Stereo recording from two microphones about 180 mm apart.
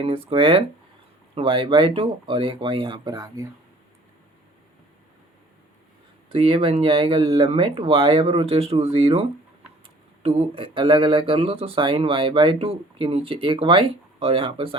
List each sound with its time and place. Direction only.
0.0 s speech: 30° right (ahead or behind)
6.3 s speech: 30° right (ahead or behind)